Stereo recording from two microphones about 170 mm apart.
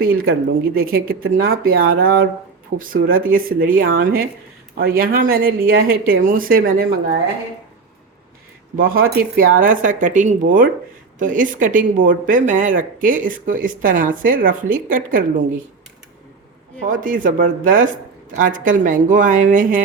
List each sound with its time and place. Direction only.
0.0 s speech: 60° right (ahead or behind)
8.7 s speech: 55° right (ahead or behind)
16.8 s speech: 55° right (ahead or behind)